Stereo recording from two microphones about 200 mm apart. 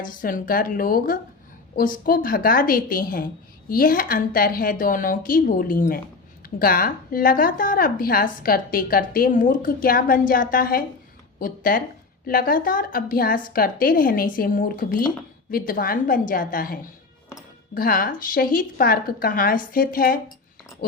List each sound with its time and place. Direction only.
0.0 s a woman's voice: 45° left (ahead or behind)
17.7 s a woman's voice: 45° left (ahead or behind)